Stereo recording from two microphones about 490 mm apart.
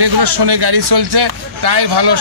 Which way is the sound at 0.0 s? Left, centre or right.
Right.